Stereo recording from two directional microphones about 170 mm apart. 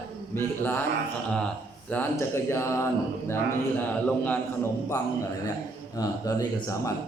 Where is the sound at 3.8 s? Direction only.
10° left (ahead or behind).